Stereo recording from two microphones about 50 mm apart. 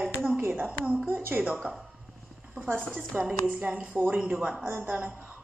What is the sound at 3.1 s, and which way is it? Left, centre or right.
Speech, right.